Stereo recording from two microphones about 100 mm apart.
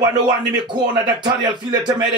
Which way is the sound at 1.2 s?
50° right (ahead or behind).